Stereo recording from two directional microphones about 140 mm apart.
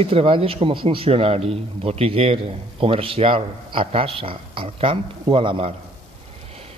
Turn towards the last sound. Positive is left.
turn(degrees=-40)  # may be behind; listen again after turning